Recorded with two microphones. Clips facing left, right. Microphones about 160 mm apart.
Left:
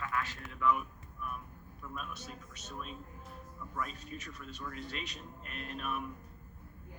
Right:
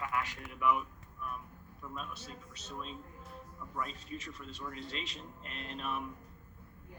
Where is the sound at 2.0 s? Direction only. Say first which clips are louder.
Left 1 dB; 30° right (ahead or behind).